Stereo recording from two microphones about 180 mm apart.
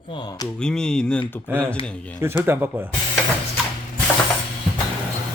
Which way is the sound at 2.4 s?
10° right (ahead or behind).